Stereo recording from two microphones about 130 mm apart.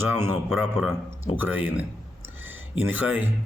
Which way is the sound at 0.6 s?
5° left (ahead or behind).